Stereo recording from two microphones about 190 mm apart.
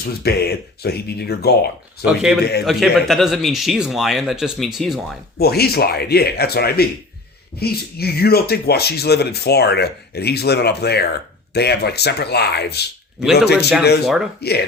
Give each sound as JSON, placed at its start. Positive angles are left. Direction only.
{"t": 0.0, "sound": "speech", "side_deg": 55}
{"t": 2.0, "sound": "speech", "side_deg": -5}
{"t": 2.4, "sound": "speech", "side_deg": 60}
{"t": 2.6, "sound": "speech", "side_deg": 0}
{"t": 5.4, "sound": "speech", "side_deg": 55}